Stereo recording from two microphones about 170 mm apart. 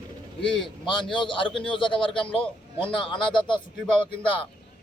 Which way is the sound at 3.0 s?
30° left (ahead or behind).